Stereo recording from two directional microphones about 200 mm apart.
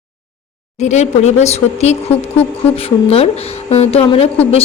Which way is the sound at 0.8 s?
35° left (ahead or behind).